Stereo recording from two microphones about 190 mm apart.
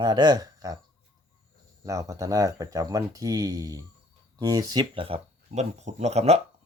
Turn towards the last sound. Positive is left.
turn(degrees=-35)  # may be behind; listen again after turning